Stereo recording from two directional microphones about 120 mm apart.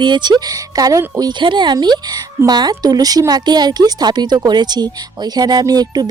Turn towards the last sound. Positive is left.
turn(degrees=-35)  # may be behind; listen again after turning